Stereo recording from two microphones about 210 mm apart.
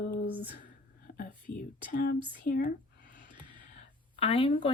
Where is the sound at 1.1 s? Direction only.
50° left (ahead or behind).